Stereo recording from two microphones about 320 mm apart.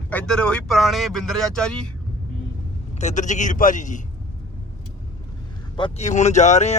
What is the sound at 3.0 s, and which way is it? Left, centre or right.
Speech, left.